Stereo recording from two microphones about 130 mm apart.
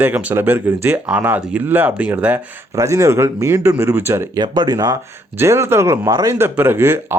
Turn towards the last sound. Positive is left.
turn(degrees=-15)  # may be behind; listen again after turning